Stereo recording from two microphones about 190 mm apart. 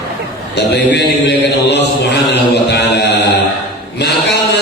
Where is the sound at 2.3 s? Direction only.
60° left (ahead or behind).